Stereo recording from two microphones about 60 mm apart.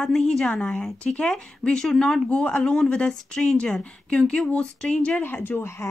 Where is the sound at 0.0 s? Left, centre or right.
Centre.